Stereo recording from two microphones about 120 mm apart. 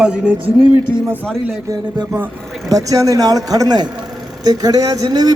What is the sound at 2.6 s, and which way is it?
Speech, 30° right (ahead or behind).